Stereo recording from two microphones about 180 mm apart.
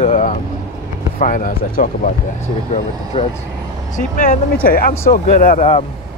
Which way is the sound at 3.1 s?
30° left (ahead or behind).